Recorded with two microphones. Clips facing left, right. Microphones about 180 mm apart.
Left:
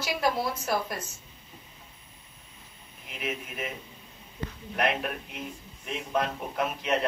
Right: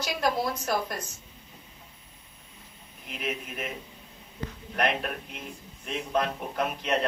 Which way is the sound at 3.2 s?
Centre (ahead or behind).